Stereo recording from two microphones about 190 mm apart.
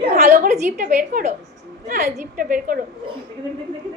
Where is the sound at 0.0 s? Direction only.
35° right (ahead or behind).